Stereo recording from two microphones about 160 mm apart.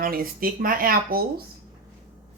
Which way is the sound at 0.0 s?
65° right (ahead or behind).